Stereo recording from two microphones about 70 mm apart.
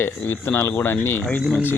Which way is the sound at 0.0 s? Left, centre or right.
Left.